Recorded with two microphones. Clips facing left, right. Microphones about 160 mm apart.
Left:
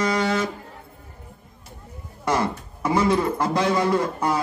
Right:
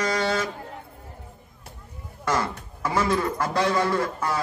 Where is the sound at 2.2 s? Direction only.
20° left (ahead or behind).